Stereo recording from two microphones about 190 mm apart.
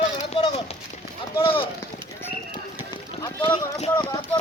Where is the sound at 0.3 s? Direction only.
25° left (ahead or behind).